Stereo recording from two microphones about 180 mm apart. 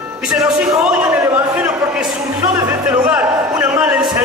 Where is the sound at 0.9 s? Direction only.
10° right (ahead or behind).